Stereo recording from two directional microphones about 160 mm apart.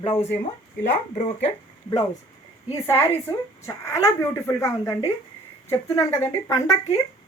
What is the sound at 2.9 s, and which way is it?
Speech, 15° left (ahead or behind).